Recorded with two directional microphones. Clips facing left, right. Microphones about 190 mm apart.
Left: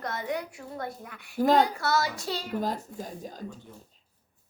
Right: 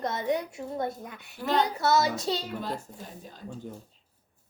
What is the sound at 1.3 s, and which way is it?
Female singing, 40° left (ahead or behind).